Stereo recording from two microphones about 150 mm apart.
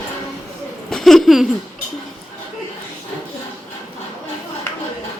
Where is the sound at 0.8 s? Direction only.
Centre (ahead or behind).